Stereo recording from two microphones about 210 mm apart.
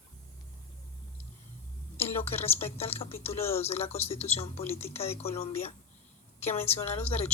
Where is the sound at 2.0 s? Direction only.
30° left (ahead or behind).